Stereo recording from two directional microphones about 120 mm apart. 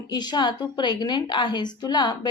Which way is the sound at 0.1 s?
35° left (ahead or behind).